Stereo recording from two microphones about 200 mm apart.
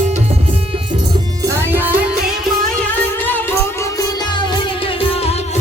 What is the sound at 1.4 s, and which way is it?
Music, 15° right (ahead or behind).